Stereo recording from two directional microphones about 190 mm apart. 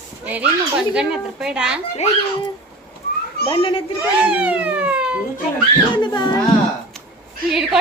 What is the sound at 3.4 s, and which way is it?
Speech, 30° left (ahead or behind).